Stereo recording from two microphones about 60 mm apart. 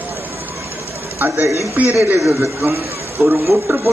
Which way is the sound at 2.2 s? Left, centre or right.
Right.